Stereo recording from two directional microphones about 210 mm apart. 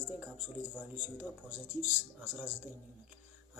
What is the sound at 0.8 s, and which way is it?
Speech, 10° right (ahead or behind).